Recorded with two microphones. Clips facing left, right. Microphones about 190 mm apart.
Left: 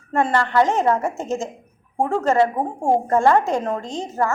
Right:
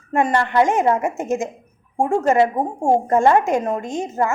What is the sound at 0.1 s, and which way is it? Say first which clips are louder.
A woman's voice: right 1 dB; 15° right (ahead or behind).